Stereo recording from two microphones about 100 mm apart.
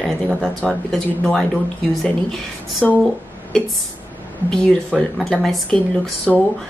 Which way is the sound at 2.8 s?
10° left (ahead or behind).